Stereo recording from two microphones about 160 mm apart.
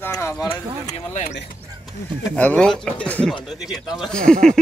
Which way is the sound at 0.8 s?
50° left (ahead or behind).